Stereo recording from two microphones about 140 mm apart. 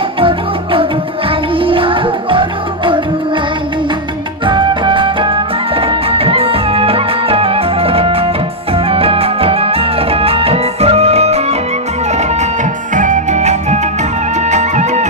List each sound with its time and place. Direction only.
1.6 s music: 40° right (ahead or behind)
4.5 s music: 35° right (ahead or behind); by 12.4 s 55° right (ahead or behind)
12.9 s music: 65° right (ahead or behind)